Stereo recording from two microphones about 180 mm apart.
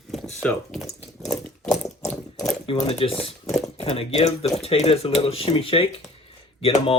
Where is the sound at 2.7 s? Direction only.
30° left (ahead or behind).